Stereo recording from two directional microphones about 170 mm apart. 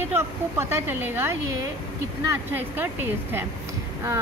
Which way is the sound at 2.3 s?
10° right (ahead or behind).